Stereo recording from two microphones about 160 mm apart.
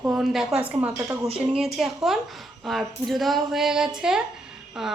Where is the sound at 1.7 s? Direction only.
Centre (ahead or behind).